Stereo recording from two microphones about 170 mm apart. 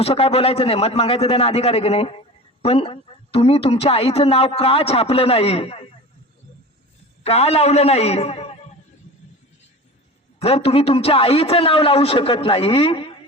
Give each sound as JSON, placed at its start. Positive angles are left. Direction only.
{"t": 0.0, "sound": "a man's voice", "side_deg": 35}
{"t": 7.3, "sound": "a man's voice", "side_deg": 35}
{"t": 10.4, "sound": "a man's voice", "side_deg": 35}